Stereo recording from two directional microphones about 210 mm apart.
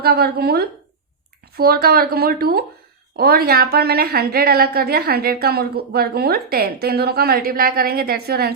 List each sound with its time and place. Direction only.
0.0 s a woman's voice: 45° right (ahead or behind)